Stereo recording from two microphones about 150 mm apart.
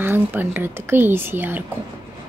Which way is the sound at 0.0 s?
15° right (ahead or behind).